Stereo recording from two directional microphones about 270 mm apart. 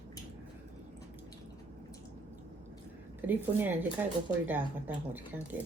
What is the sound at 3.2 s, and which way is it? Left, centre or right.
Speech, centre.